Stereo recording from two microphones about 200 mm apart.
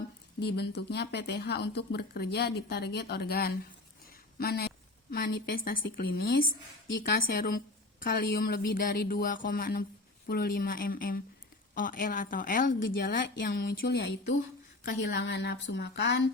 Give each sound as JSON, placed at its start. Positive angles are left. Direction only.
{"t": 0.3, "sound": "a woman's voice", "side_deg": 55}
{"t": 4.0, "sound": "a sound", "side_deg": 50}
{"t": 5.1, "sound": "a woman's voice", "side_deg": 50}
{"t": 13.5, "sound": "a woman's voice", "side_deg": 60}